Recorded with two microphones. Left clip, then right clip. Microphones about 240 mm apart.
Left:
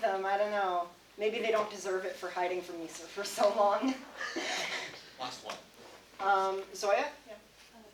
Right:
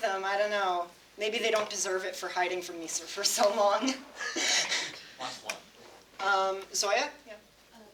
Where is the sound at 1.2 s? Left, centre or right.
Right.